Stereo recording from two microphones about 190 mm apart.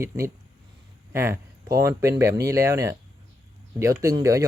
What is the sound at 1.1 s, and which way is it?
Speech, 15° right (ahead or behind).